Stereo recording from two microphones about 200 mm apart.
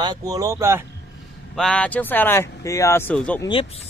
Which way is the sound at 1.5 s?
5° left (ahead or behind).